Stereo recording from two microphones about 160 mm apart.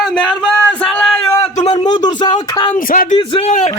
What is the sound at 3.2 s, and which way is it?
Speech, 35° left (ahead or behind).